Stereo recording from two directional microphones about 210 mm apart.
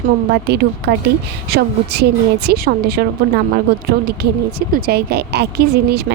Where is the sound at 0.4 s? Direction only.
50° right (ahead or behind).